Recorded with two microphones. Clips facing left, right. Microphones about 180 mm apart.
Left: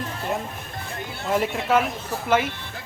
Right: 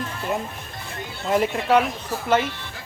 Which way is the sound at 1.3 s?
Centre (ahead or behind).